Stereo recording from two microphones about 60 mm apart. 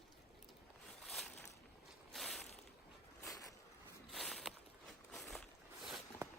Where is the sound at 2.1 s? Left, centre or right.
Centre.